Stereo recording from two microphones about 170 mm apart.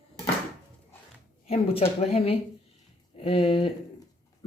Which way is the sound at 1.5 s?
35° left (ahead or behind).